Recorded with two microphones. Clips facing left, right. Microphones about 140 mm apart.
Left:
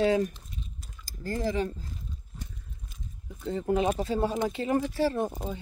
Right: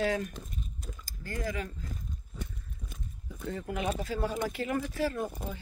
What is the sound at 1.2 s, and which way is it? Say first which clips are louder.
Speech: left 7 dB; 30° left (ahead or behind).